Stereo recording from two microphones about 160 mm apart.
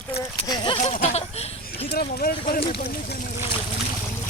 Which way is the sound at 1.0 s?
40° left (ahead or behind).